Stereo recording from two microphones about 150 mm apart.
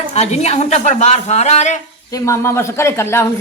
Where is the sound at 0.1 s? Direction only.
45° left (ahead or behind).